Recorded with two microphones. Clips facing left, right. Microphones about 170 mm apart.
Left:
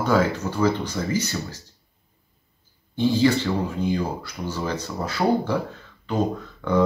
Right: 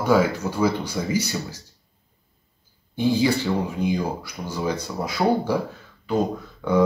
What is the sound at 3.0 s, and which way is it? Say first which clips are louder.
Speech: left 1 dB; 10° right (ahead or behind).